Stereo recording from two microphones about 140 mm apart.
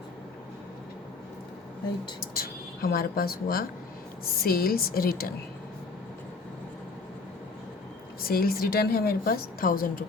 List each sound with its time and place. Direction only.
2.2 s a woman's voice: 90° left
8.2 s a woman's voice: 90° left